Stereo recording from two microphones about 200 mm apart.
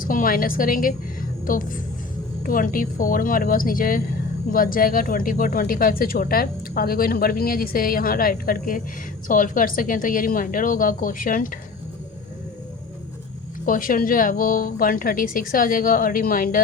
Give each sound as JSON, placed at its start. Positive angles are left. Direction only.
{"t": 0.0, "sound": "speech", "side_deg": 45}
{"t": 13.7, "sound": "speech", "side_deg": 45}